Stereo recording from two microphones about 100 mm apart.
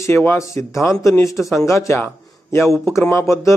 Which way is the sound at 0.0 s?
25° left (ahead or behind).